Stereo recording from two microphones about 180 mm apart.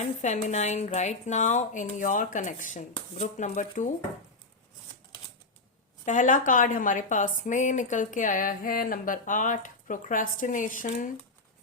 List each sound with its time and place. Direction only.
0.0 s a woman's voice: 40° left (ahead or behind)
6.1 s a woman's voice: 45° left (ahead or behind)